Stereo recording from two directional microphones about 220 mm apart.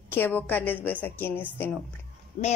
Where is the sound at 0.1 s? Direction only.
10° left (ahead or behind).